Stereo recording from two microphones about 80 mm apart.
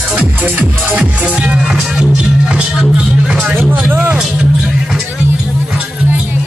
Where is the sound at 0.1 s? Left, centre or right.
Centre.